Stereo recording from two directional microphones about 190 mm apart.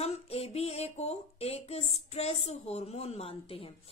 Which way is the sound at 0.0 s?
35° left (ahead or behind).